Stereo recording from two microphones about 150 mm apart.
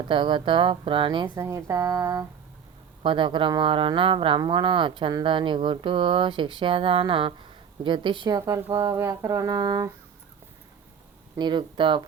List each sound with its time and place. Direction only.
0.1 s speech: 35° right (ahead or behind)
1.5 s speech: 20° right (ahead or behind)
3.0 s speech: 35° right (ahead or behind)
11.3 s speech: 30° right (ahead or behind)